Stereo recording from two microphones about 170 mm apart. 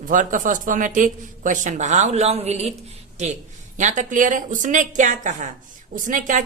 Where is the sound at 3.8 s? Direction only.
45° right (ahead or behind).